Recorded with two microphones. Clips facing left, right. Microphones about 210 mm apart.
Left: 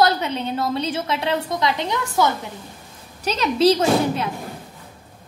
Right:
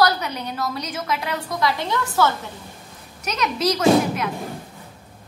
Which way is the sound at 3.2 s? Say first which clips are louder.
Left 6 dB; 30° left (ahead or behind).